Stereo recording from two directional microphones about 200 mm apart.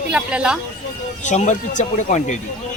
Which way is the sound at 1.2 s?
35° left (ahead or behind).